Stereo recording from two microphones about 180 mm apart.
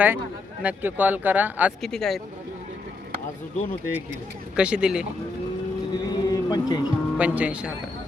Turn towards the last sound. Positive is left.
turn(degrees=-5)  # may be behind; listen again after turning